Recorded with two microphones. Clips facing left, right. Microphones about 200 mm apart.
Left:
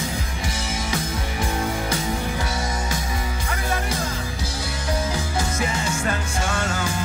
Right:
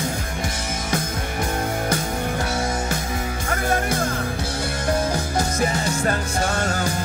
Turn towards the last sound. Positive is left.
turn(degrees=-40)  # may be behind; listen again after turning